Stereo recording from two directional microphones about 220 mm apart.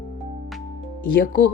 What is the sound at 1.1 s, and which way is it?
Speech, 40° left (ahead or behind).